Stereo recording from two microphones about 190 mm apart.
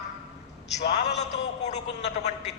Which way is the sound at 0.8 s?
60° left (ahead or behind).